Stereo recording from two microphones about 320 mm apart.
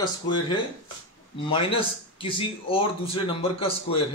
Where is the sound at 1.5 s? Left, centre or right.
Centre.